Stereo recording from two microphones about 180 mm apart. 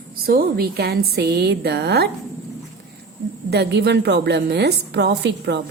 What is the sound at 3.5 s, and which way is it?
A woman's voice, 65° right (ahead or behind).